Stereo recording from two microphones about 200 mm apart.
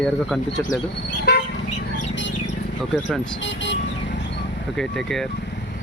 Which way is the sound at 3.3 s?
65° left (ahead or behind).